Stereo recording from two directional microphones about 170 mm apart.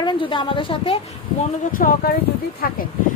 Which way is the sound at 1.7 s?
55° left (ahead or behind).